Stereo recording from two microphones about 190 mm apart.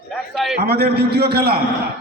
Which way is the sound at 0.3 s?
Centre (ahead or behind).